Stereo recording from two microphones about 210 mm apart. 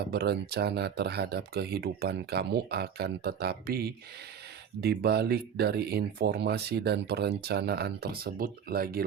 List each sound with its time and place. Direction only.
0.1 s speech: 50° right (ahead or behind)